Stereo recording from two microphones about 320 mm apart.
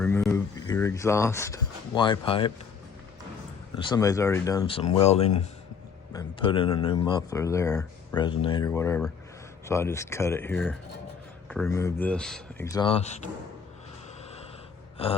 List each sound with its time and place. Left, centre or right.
0.0 s speech: centre
3.8 s speech: centre